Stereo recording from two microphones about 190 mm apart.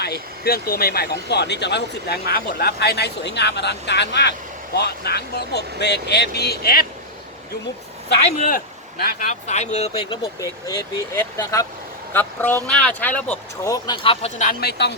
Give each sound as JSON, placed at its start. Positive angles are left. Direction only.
{"t": 0.0, "sound": "speech", "side_deg": 55}
{"t": 8.4, "sound": "speech", "side_deg": 45}
{"t": 9.3, "sound": "speech", "side_deg": 35}
{"t": 10.4, "sound": "speech", "side_deg": 15}
{"t": 13.7, "sound": "speech", "side_deg": 20}
{"t": 14.6, "sound": "speech", "side_deg": 60}